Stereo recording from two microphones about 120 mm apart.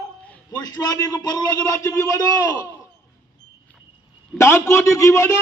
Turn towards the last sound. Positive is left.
turn(degrees=25)  # may be behind; listen again after turning